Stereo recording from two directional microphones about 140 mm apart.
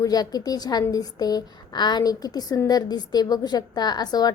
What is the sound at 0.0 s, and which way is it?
A woman's voice, 25° left (ahead or behind).